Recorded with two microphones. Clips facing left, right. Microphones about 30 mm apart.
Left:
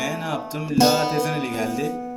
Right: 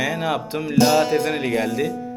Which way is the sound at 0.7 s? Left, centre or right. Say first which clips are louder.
Right 1 dB; left.